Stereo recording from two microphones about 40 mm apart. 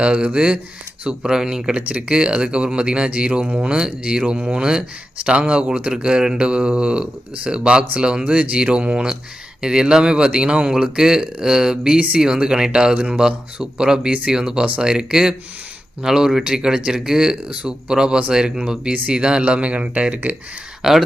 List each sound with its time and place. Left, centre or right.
0.0 s speech: right
1.7 s speech: right
3.8 s speech: right
8.2 s speech: right; by 14.1 s centre
14.1 s speech: right
14.3 s speech: centre; by 20.3 s right
20.8 s speech: centre